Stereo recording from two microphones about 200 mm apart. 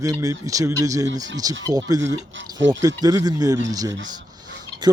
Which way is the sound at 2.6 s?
65° right (ahead or behind).